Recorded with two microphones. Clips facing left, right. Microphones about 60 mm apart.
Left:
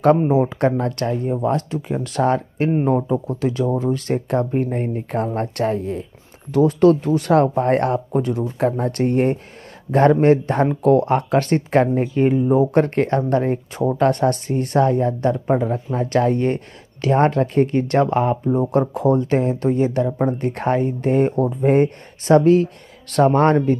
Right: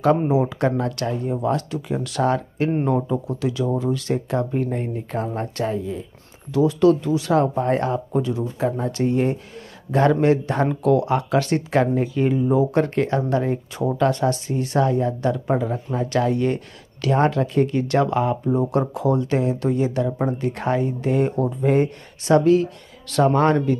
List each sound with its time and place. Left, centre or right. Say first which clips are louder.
0.3 s a man's voice: left 3 dB; left